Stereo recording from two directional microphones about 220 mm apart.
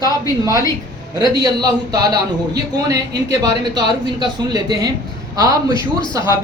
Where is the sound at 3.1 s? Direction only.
20° right (ahead or behind).